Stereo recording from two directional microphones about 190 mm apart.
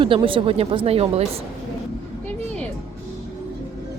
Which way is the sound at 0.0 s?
25° right (ahead or behind).